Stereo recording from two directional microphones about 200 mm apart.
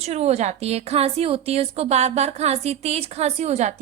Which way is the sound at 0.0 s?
30° right (ahead or behind).